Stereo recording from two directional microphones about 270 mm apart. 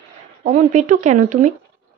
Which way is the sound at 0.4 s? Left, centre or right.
Right.